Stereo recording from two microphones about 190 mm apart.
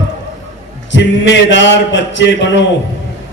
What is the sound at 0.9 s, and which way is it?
Speech, 70° left (ahead or behind).